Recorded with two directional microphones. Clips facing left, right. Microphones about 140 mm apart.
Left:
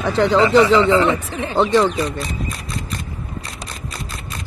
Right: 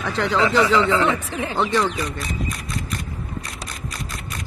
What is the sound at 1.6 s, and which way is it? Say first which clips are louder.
Speech: left 6 dB; 30° left (ahead or behind).